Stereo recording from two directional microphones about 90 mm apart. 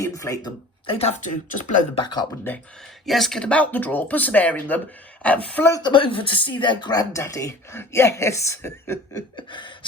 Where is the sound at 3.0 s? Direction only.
Centre (ahead or behind).